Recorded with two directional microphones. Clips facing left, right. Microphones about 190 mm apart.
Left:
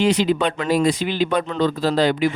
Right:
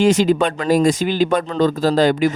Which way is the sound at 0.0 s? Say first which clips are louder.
Right 3 dB; 45° right (ahead or behind).